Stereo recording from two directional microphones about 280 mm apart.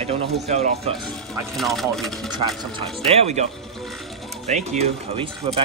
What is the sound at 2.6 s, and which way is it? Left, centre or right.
Speech, centre.